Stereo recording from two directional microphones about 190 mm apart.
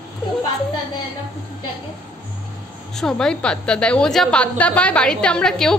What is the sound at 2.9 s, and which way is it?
A woman's voice, 5° left (ahead or behind).